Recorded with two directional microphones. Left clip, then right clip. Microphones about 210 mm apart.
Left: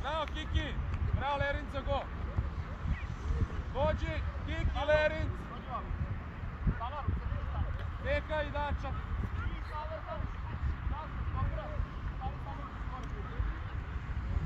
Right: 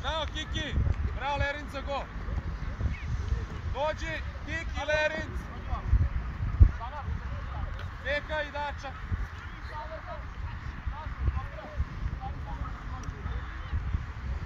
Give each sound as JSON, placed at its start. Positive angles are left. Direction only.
{"t": 0.0, "sound": "a sound", "side_deg": -45}
{"t": 3.7, "sound": "a man's voice", "side_deg": -50}
{"t": 8.0, "sound": "a man's voice", "side_deg": -50}